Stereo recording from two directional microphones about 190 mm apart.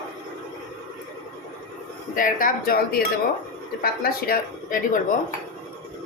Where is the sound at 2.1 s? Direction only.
45° left (ahead or behind).